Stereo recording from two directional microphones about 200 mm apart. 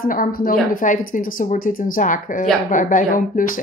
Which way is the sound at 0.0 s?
45° left (ahead or behind).